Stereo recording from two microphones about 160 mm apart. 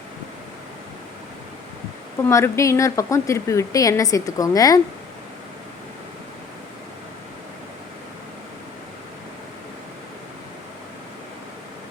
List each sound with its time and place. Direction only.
2.2 s a woman's voice: 15° left (ahead or behind)